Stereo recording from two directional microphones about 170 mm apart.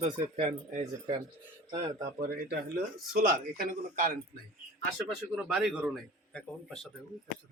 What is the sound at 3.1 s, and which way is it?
Speech, 60° right (ahead or behind).